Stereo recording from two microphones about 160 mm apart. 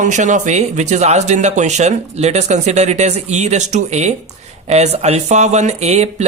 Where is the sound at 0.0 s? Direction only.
50° right (ahead or behind).